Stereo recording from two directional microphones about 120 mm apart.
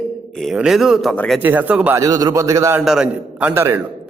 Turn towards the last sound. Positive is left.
turn(degrees=-20)  # may be behind; listen again after turning